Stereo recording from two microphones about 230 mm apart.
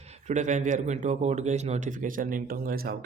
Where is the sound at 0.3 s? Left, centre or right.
Right.